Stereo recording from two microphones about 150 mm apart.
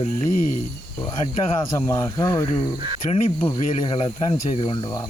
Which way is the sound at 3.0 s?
40° left (ahead or behind).